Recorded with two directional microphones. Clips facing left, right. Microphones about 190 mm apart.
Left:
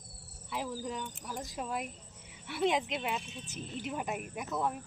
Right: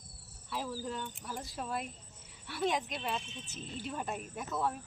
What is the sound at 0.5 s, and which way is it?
Speech, 15° left (ahead or behind).